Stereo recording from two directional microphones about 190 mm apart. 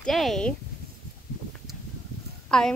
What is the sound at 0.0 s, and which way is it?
Speech, centre (ahead or behind).